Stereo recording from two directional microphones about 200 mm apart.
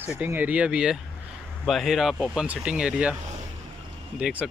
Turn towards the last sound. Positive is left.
turn(degrees=-5)  # may be behind; listen again after turning